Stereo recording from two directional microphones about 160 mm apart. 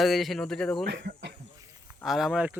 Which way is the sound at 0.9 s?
90° right.